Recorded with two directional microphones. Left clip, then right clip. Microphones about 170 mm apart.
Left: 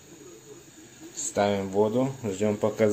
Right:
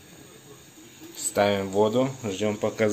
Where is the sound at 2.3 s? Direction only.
25° left (ahead or behind).